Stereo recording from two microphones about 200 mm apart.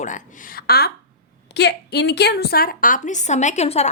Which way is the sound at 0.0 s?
40° left (ahead or behind).